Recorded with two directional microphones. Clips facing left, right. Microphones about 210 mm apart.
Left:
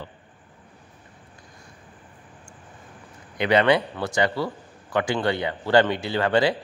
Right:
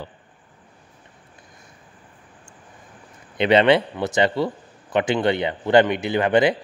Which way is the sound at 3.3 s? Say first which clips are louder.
Right 3 dB; 25° right (ahead or behind).